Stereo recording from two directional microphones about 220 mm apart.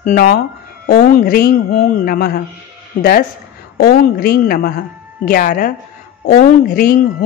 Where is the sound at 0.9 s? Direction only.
40° left (ahead or behind).